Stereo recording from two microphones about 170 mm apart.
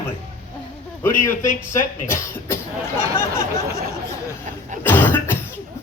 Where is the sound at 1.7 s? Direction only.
15° left (ahead or behind).